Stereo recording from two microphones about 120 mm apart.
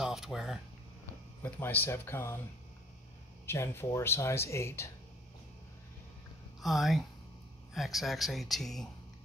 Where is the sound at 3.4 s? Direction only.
20° left (ahead or behind).